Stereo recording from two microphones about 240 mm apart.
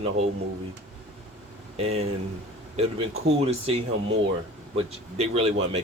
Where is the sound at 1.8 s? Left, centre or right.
Right.